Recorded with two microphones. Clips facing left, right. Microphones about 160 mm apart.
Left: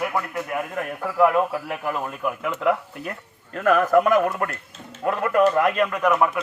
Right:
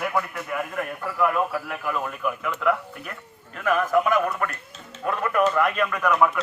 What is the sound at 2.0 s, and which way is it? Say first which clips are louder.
Speech: left 1 dB; 30° left (ahead or behind).